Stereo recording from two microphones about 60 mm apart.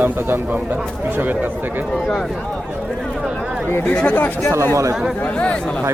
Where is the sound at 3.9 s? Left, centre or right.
Left.